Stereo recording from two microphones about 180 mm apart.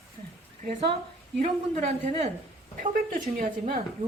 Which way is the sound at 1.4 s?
35° right (ahead or behind).